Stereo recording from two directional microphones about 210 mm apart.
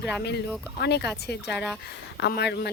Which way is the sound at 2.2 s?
50° left (ahead or behind).